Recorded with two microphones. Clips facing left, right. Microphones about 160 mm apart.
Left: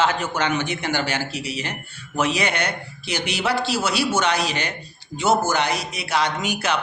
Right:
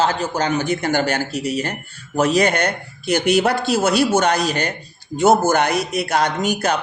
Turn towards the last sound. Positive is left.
turn(degrees=-45)  # may be behind; listen again after turning